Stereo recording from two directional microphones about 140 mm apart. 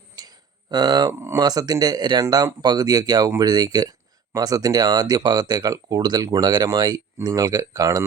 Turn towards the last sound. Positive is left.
turn(degrees=-25)  # may be behind; listen again after turning